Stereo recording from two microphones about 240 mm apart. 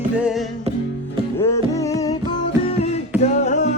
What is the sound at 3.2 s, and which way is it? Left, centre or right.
Music, left.